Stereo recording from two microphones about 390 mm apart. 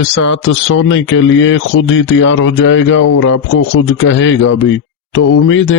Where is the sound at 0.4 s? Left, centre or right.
Left.